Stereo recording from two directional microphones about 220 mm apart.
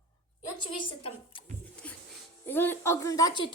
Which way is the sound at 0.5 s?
20° left (ahead or behind).